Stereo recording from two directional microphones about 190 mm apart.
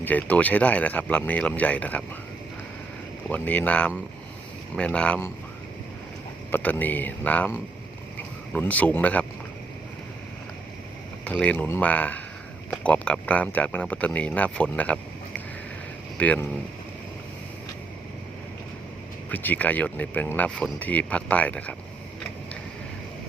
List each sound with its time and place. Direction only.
0.0 s speech: 10° left (ahead or behind)
3.2 s speech: 10° left (ahead or behind)
6.5 s speech: 10° left (ahead or behind)
8.5 s speech: 10° left (ahead or behind)
11.3 s speech: 5° left (ahead or behind)
16.1 s speech: 10° left (ahead or behind)
19.3 s speech: 10° left (ahead or behind)